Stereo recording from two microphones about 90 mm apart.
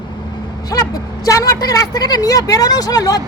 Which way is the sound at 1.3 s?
40° left (ahead or behind).